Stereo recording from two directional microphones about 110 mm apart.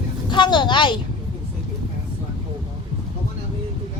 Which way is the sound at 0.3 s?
45° left (ahead or behind).